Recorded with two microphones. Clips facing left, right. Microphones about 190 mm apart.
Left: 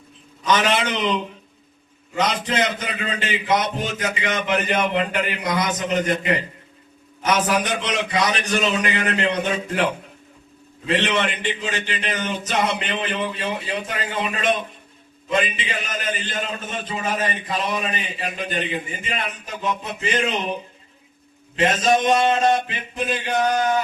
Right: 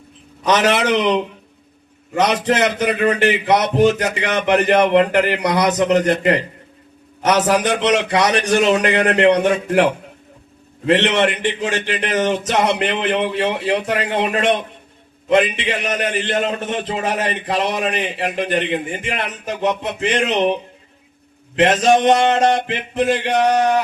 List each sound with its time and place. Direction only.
0.4 s a man's voice: 70° right (ahead or behind)